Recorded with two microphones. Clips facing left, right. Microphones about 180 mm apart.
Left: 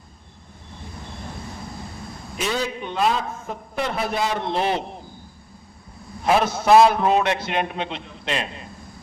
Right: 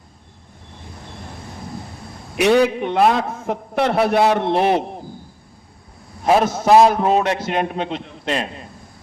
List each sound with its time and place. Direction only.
2.3 s a man's voice: 70° right (ahead or behind)
6.2 s a man's voice: 40° right (ahead or behind)